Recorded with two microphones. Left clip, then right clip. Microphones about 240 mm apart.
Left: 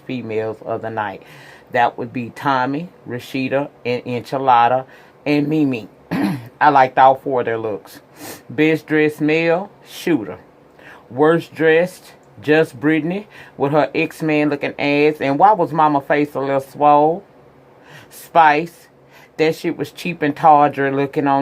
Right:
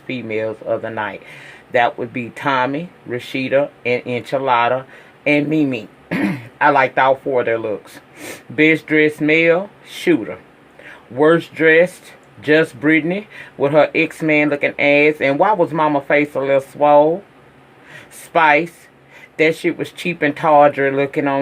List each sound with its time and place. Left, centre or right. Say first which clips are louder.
0.1 s a man's voice: right 1 dB; left
17.9 s a sound: left 3 dB; left
19.4 s a man's voice: right 2 dB; left